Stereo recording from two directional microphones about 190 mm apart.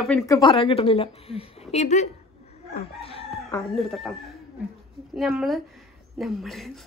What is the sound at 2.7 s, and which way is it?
Chicken, 30° left (ahead or behind).